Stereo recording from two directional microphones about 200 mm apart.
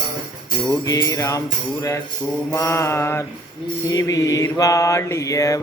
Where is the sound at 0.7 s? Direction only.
15° left (ahead or behind).